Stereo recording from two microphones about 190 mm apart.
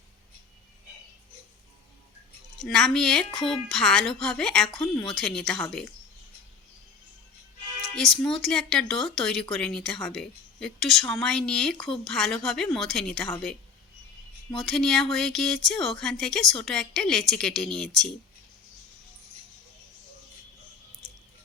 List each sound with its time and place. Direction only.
2.6 s speech: centre (ahead or behind)
7.9 s speech: centre (ahead or behind)
14.5 s speech: centre (ahead or behind)